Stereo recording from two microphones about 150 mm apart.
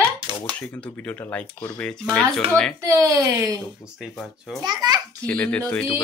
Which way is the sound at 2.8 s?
20° right (ahead or behind).